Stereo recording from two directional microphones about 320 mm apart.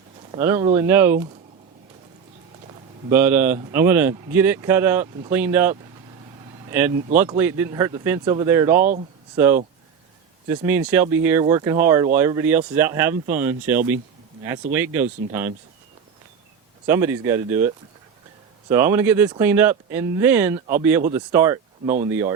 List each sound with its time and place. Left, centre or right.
0.3 s speech: centre
3.1 s speech: centre
16.8 s speech: centre
18.7 s speech: centre
21.8 s speech: right